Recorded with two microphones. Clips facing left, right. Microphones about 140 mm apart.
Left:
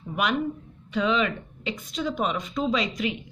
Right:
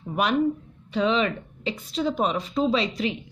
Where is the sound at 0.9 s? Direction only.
30° right (ahead or behind).